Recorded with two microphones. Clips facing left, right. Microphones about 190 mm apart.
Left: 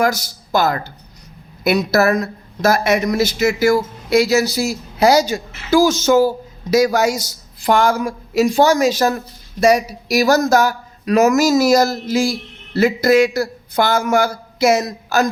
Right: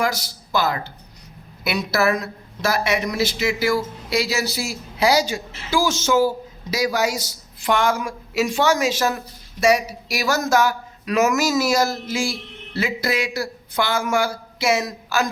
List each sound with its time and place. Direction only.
0.0 s a man's voice: 45° left (ahead or behind)